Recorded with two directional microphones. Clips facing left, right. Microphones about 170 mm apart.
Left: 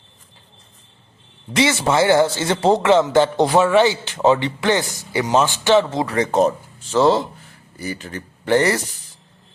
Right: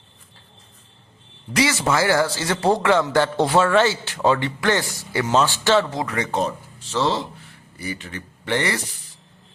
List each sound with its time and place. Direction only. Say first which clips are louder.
1.5 s a man's voice: left 3 dB; 25° left (ahead or behind); by 8.8 s 40° left (ahead or behind)